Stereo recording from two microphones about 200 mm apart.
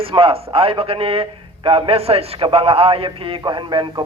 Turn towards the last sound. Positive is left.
turn(degrees=-20)  # may be behind; listen again after turning